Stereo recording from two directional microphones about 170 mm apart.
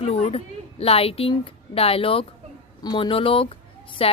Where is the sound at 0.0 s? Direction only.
35° left (ahead or behind).